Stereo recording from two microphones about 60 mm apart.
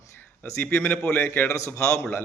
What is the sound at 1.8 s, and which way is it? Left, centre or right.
Speech, left.